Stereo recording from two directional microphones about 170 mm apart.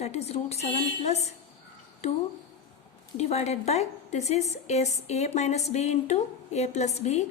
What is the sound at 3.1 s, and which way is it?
A woman's voice, 40° left (ahead or behind).